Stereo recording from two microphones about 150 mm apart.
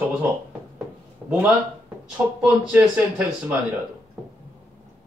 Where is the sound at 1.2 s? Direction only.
5° right (ahead or behind).